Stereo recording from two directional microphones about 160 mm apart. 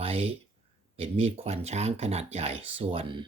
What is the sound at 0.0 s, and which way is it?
Speech, 40° right (ahead or behind).